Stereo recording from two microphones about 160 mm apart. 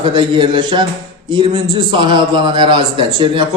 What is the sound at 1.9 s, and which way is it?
A man's voice, 30° right (ahead or behind).